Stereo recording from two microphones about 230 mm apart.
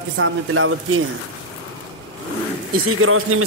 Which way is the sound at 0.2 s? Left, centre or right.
Right.